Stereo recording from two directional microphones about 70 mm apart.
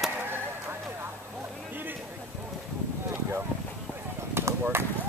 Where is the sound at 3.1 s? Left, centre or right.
Right.